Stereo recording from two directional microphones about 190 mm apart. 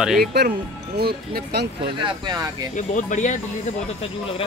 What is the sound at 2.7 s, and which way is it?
Speech, 40° left (ahead or behind).